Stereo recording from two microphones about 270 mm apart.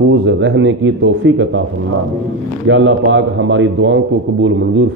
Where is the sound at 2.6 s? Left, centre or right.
Right.